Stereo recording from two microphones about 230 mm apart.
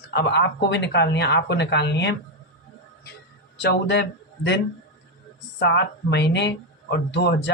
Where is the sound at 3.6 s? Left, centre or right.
Left.